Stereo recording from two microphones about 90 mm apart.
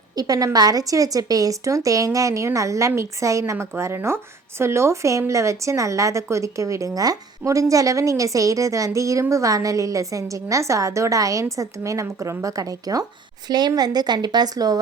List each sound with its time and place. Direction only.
0.2 s a woman's voice: 45° right (ahead or behind)